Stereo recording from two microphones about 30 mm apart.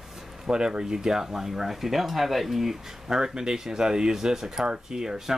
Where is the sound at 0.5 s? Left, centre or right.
Right; by 2.9 s centre.